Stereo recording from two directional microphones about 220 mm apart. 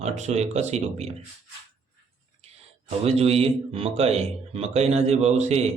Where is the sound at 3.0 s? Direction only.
30° right (ahead or behind).